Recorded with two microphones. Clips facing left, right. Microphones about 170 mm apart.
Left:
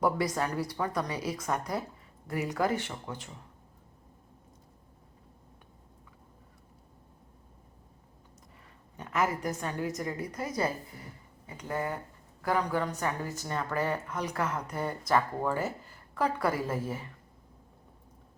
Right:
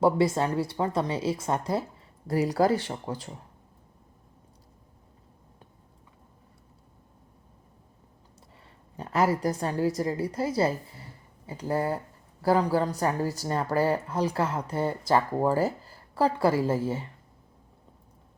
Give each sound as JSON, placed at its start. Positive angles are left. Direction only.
{"t": 0.0, "sound": "a woman's voice", "side_deg": -25}
{"t": 9.0, "sound": "a woman's voice", "side_deg": -35}